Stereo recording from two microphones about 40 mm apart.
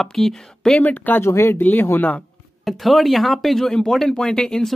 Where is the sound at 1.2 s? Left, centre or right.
Left.